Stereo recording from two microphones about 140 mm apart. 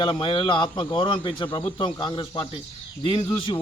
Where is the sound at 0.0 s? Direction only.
35° left (ahead or behind).